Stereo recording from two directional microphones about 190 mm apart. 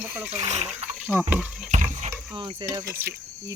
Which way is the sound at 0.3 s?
35° right (ahead or behind).